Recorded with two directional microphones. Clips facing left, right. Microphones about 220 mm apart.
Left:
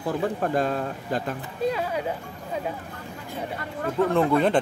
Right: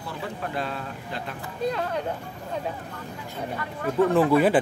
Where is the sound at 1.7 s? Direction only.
5° left (ahead or behind).